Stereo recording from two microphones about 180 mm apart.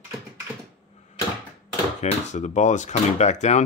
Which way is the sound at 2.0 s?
40° left (ahead or behind).